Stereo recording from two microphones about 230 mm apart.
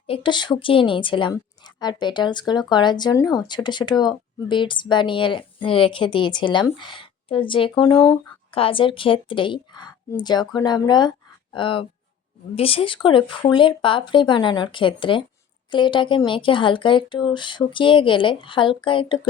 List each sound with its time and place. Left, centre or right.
0.1 s a woman's voice: left